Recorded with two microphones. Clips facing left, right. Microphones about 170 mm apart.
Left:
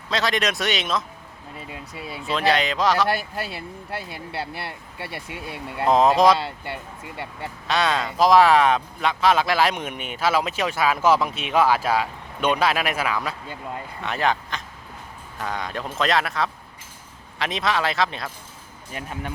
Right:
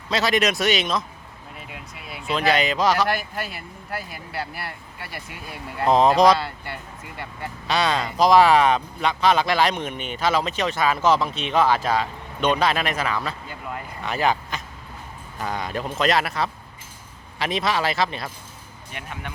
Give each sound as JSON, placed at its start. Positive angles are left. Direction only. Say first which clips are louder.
{"t": 0.1, "sound": "speech", "louder": "right 2 dB", "side_deg": -5}
{"t": 2.0, "sound": "speech", "louder": "left 3 dB", "side_deg": 35}
{"t": 2.5, "sound": "speech", "louder": "right 1 dB", "side_deg": -5}
{"t": 3.1, "sound": "speech", "louder": "left 1 dB", "side_deg": 30}
{"t": 5.8, "sound": "speech", "louder": "right 1 dB", "side_deg": 5}
{"t": 6.3, "sound": "speech", "louder": "even", "side_deg": 25}
{"t": 7.7, "sound": "speech", "louder": "even", "side_deg": 0}
{"t": 18.9, "sound": "speech", "louder": "left 3 dB", "side_deg": 40}